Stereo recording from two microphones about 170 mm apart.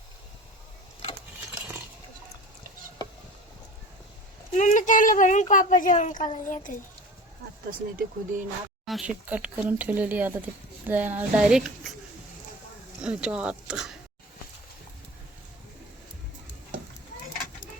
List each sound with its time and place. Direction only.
4.5 s a woman's voice: 50° left (ahead or behind)
7.7 s speech: 55° right (ahead or behind)
8.9 s speech: 5° right (ahead or behind)
13.0 s speech: 5° right (ahead or behind)